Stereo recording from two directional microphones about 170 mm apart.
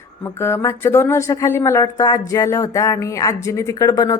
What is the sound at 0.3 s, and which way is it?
Speech, 15° left (ahead or behind).